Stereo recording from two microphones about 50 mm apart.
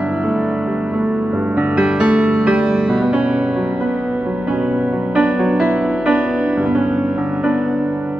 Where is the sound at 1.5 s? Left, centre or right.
Right.